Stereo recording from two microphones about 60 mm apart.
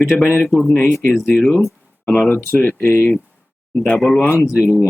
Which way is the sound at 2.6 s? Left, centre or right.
Left.